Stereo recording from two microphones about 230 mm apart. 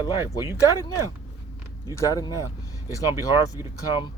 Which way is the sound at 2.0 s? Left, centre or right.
Centre.